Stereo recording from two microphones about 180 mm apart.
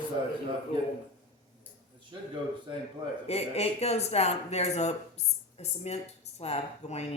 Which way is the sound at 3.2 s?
35° left (ahead or behind).